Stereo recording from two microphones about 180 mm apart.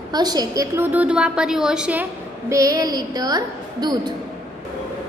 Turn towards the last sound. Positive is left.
turn(degrees=-25)  # may be behind; listen again after turning